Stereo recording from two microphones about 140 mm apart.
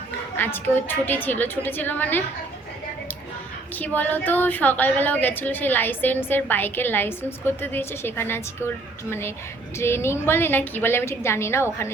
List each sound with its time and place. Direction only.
0.3 s a woman's voice: 15° left (ahead or behind)
3.8 s a woman's voice: 10° left (ahead or behind)